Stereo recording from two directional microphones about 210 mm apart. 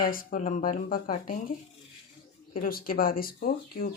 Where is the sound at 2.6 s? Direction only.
45° left (ahead or behind).